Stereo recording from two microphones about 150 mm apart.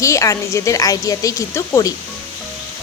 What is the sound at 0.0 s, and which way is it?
Speech, 20° left (ahead or behind).